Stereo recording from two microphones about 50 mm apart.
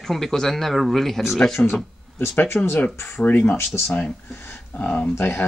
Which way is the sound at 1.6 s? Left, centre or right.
Centre.